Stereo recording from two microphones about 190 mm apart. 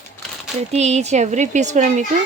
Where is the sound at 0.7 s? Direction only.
35° right (ahead or behind).